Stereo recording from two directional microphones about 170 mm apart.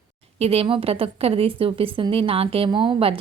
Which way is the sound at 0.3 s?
35° right (ahead or behind).